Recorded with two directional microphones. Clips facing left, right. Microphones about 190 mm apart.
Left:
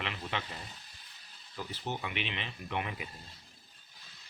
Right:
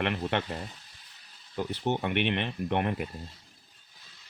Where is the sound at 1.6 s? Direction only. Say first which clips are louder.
Right 9 dB; 65° right (ahead or behind).